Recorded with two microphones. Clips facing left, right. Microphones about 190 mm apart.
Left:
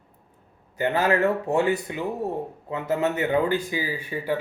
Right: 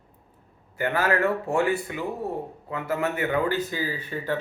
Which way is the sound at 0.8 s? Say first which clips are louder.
Left 2 dB; 20° left (ahead or behind).